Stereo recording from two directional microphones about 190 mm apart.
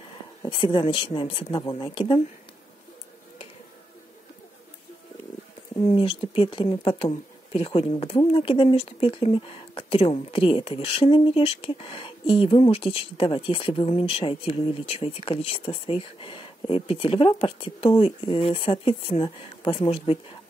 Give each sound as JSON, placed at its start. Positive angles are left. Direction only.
{"t": 0.5, "sound": "speech", "side_deg": 25}
{"t": 5.9, "sound": "speech", "side_deg": 30}